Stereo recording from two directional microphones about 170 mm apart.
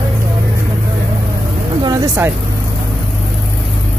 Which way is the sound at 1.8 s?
15° right (ahead or behind).